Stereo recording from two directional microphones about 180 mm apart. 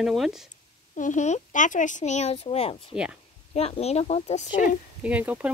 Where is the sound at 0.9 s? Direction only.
45° left (ahead or behind).